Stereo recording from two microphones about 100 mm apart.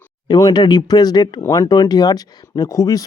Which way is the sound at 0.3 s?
40° left (ahead or behind).